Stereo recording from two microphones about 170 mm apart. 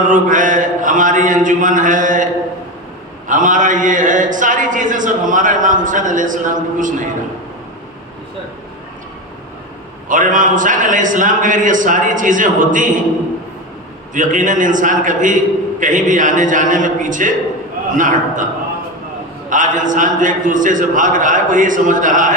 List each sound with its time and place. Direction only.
0.1 s mantra: 50° right (ahead or behind)
3.2 s a man's voice: 50° right (ahead or behind)
10.1 s a man's voice: 50° right (ahead or behind)
14.1 s a man's voice: 50° right (ahead or behind)
19.5 s a man's voice: 50° right (ahead or behind)